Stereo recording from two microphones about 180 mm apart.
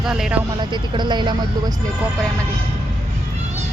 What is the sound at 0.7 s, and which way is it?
Speech, 25° right (ahead or behind).